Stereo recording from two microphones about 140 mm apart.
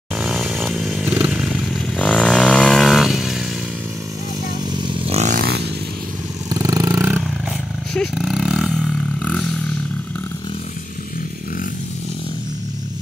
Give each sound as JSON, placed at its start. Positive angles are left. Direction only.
{"t": 0.2, "sound": "chainsaw", "side_deg": -5}
{"t": 2.0, "sound": "motorcycle", "side_deg": 5}
{"t": 4.8, "sound": "vehicle", "side_deg": -45}
{"t": 6.5, "sound": "roar", "side_deg": -25}
{"t": 7.9, "sound": "roar", "side_deg": 0}